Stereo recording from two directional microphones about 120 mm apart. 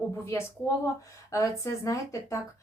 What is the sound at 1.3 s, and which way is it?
Speech, 25° left (ahead or behind).